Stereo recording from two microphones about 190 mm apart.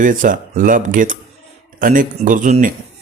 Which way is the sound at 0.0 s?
45° right (ahead or behind).